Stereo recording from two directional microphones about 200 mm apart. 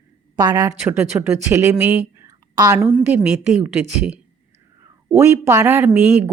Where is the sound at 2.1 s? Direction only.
15° right (ahead or behind).